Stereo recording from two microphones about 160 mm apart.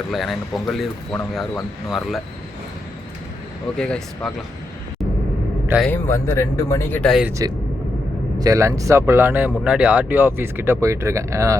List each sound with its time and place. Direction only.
0.1 s speech: centre (ahead or behind)
3.8 s speech: 5° left (ahead or behind)
5.8 s speech: 15° left (ahead or behind)
7.1 s speech: 5° right (ahead or behind)
8.4 s speech: 20° right (ahead or behind)